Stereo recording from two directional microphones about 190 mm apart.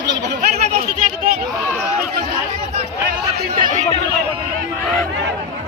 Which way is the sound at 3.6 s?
45° right (ahead or behind).